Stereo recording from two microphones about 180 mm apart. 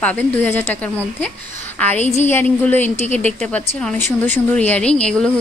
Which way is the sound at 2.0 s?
40° left (ahead or behind).